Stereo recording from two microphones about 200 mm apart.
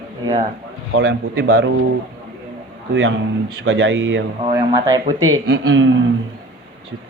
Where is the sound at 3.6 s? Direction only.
60° right (ahead or behind).